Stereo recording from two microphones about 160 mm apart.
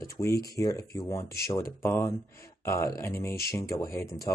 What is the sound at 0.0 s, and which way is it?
Speech, 20° left (ahead or behind).